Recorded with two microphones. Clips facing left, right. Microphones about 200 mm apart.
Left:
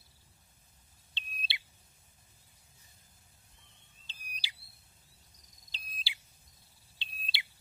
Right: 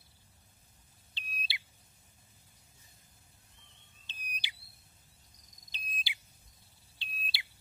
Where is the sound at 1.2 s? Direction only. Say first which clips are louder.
Right 1 dB; 25° left (ahead or behind).